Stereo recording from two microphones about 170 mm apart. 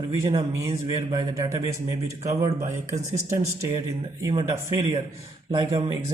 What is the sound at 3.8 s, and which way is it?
A man's voice, 20° right (ahead or behind).